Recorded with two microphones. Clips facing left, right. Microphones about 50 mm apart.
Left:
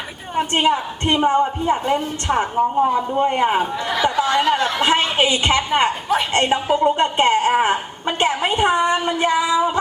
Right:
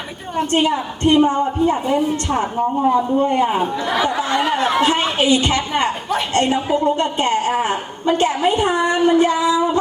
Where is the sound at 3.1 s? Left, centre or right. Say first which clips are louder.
Right 1 dB; left.